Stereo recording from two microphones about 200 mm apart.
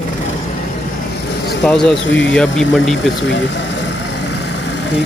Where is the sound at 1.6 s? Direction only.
Centre (ahead or behind).